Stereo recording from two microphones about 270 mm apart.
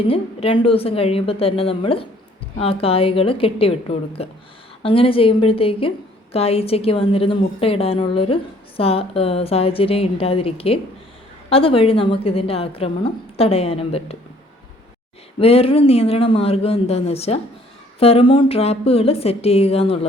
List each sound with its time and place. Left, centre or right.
0.1 s a woman's voice: left
15.4 s a woman's voice: left